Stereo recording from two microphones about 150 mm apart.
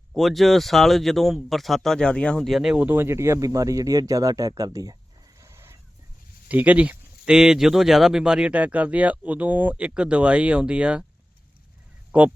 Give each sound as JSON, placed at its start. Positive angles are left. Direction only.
{"t": 0.1, "sound": "speech", "side_deg": 0}
{"t": 5.4, "sound": "a sound", "side_deg": -15}
{"t": 6.5, "sound": "speech", "side_deg": -10}